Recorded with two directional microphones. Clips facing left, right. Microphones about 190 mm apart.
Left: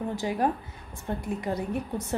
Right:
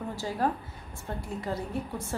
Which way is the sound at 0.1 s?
15° left (ahead or behind).